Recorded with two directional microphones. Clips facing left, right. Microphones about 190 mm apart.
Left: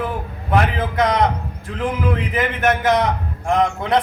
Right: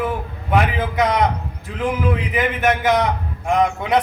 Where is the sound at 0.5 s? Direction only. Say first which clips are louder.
Even; centre (ahead or behind).